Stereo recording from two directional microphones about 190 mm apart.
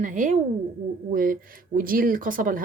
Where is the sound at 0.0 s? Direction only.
40° right (ahead or behind).